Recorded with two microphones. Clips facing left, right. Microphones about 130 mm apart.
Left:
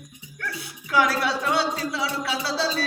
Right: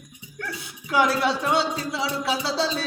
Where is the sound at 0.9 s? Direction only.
25° right (ahead or behind).